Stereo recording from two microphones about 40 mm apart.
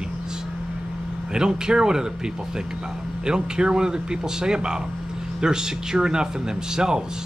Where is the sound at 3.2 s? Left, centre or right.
Right.